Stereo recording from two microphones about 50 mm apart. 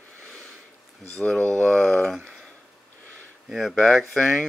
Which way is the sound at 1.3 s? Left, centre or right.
Left.